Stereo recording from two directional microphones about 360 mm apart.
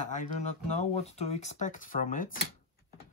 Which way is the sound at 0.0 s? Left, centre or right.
Centre.